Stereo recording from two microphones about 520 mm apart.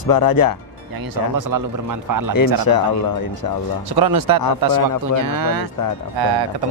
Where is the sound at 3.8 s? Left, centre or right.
Right.